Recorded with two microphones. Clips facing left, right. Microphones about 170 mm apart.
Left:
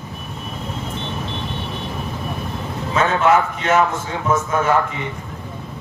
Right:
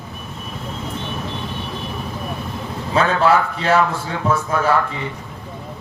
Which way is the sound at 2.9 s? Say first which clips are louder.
Even; 35° right (ahead or behind).